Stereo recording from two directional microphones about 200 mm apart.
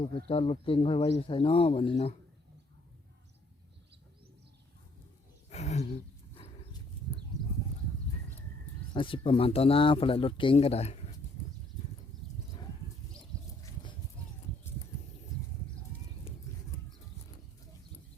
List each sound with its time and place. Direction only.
0.3 s speech: 25° left (ahead or behind)
5.5 s a sound: 35° left (ahead or behind)
6.4 s dog: 25° left (ahead or behind)
8.9 s speech: 25° left (ahead or behind)
12.2 s horse: centre (ahead or behind)